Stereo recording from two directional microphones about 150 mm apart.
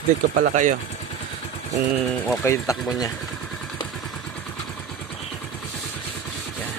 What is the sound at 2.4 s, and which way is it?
Speech, 20° left (ahead or behind).